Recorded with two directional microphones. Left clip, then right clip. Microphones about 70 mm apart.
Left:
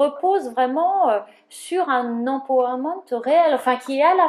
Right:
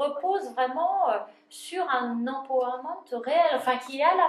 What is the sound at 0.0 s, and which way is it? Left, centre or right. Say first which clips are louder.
A woman's voice: left 8 dB; left.